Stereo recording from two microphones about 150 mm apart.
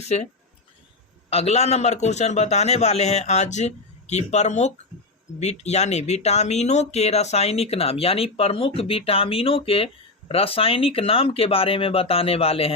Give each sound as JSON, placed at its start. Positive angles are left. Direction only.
{"t": 1.3, "sound": "a man's voice", "side_deg": 45}